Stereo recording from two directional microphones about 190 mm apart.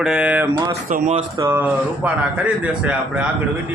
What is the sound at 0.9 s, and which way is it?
Speech, 45° right (ahead or behind).